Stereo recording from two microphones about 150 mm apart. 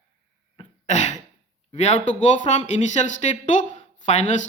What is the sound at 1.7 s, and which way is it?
Speech, 50° left (ahead or behind).